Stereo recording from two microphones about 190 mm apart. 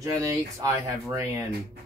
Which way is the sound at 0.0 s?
20° right (ahead or behind).